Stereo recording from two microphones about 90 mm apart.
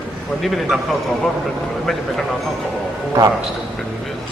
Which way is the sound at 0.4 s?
Centre (ahead or behind).